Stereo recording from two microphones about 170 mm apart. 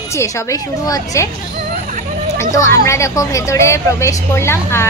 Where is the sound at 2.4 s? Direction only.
15° left (ahead or behind).